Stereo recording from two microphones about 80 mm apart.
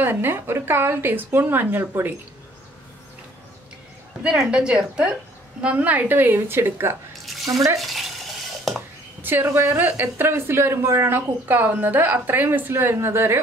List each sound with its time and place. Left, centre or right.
0.0 s speech: right
4.2 s a woman's voice: centre; by 7.0 s right
7.4 s speech: right
7.7 s stir: centre
8.7 s speech: right